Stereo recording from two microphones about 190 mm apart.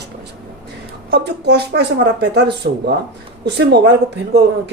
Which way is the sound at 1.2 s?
60° right (ahead or behind).